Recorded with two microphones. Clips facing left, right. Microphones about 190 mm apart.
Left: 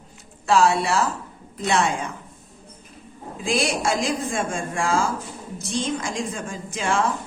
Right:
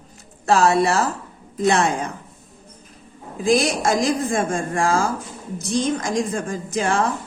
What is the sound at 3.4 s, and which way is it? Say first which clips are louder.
Speech: right 5 dB; 40° right (ahead or behind).